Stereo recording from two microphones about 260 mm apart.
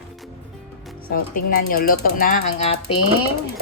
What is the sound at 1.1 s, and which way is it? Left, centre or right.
Speech, left.